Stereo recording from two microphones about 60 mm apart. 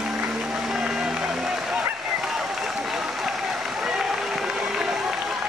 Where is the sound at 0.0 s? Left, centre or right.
Centre.